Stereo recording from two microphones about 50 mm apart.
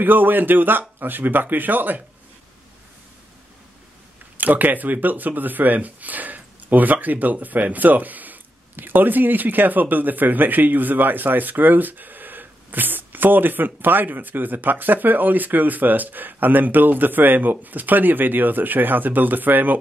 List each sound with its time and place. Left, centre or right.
0.0 s speech: right
4.4 s speech: right